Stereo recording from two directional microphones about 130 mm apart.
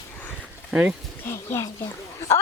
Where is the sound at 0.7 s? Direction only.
5° right (ahead or behind).